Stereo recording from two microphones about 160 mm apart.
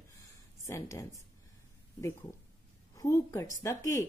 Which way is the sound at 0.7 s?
20° left (ahead or behind).